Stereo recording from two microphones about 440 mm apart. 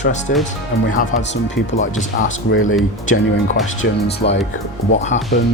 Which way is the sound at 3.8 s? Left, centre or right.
Left.